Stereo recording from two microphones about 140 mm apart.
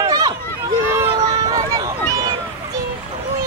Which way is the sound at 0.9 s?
25° right (ahead or behind).